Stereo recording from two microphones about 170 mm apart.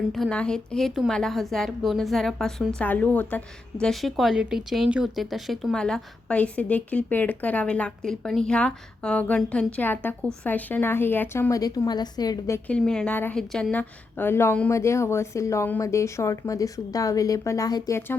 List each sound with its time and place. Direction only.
0.1 s a woman's voice: 5° left (ahead or behind); by 12.5 s 25° left (ahead or behind)
12.6 s a woman's voice: 5° left (ahead or behind)